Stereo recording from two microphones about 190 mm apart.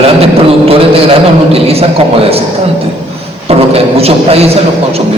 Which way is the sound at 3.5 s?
30° right (ahead or behind).